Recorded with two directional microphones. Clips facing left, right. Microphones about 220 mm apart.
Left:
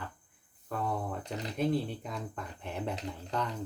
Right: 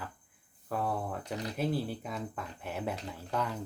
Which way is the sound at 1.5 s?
5° right (ahead or behind).